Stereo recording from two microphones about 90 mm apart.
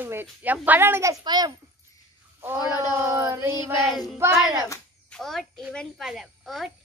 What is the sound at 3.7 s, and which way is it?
Speech, centre (ahead or behind).